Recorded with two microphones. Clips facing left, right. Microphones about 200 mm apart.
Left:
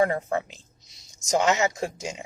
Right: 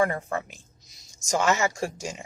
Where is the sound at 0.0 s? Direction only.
20° left (ahead or behind).